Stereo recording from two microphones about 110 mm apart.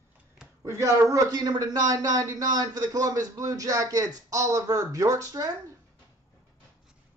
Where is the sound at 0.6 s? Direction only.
30° right (ahead or behind).